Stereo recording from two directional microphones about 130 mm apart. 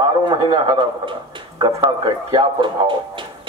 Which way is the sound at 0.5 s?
40° right (ahead or behind).